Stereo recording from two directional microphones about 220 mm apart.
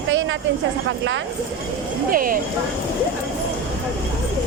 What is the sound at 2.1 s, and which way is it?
Speech, 40° right (ahead or behind).